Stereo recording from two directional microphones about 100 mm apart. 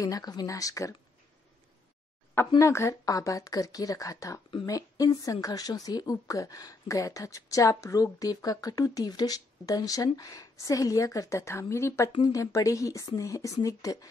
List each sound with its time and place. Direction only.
0.0 s speech: 40° left (ahead or behind)
2.6 s speech: 30° left (ahead or behind)